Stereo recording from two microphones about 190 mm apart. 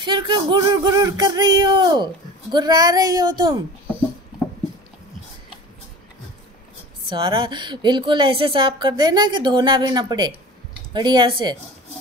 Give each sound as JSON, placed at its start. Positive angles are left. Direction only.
{"t": 0.0, "sound": "a woman's voice", "side_deg": -25}
{"t": 7.1, "sound": "a woman's voice", "side_deg": -25}